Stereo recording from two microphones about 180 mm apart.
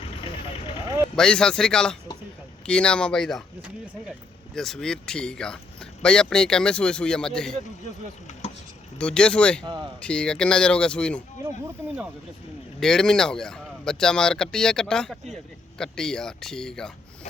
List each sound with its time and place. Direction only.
1.1 s speech: 5° left (ahead or behind)
4.5 s speech: centre (ahead or behind)
8.3 s a sound: 40° left (ahead or behind)
9.0 s speech: 5° left (ahead or behind)
9.6 s speech: 25° right (ahead or behind)
10.0 s speech: 5° left (ahead or behind)
11.4 s speech: 15° right (ahead or behind)
12.8 s speech: 5° left (ahead or behind)